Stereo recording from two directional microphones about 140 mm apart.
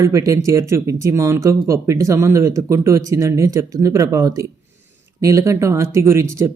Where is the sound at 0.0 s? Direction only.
20° right (ahead or behind).